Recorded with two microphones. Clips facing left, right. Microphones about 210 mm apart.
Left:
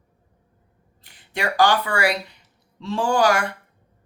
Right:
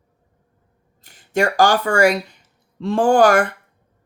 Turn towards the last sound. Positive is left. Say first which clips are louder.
# right 6 dB
turn(degrees=-50)  # may be behind; listen again after turning